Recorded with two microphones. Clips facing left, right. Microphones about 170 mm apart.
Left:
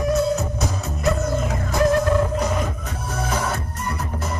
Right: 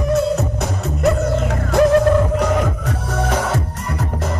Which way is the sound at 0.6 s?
65° right (ahead or behind).